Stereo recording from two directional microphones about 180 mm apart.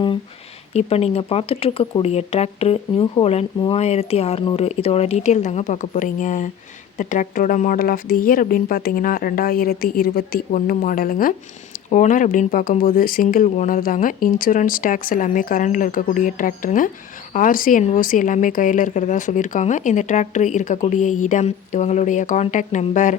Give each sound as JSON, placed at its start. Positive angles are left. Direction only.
{"t": 0.7, "sound": "speech", "side_deg": 35}